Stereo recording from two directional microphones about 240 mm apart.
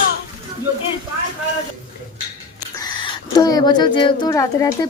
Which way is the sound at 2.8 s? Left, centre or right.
Centre.